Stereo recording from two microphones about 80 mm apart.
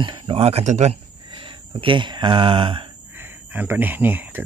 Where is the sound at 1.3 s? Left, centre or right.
Right.